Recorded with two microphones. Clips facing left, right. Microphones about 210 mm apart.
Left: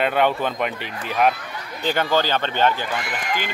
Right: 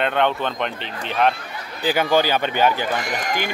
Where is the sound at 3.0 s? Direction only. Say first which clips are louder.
Right 2 dB; 40° right (ahead or behind).